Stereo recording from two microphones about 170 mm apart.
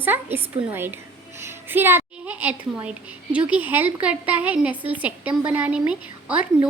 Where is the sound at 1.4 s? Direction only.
15° right (ahead or behind).